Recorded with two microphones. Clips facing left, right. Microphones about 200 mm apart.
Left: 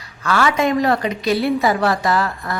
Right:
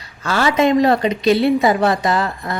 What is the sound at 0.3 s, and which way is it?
Speech, 25° right (ahead or behind).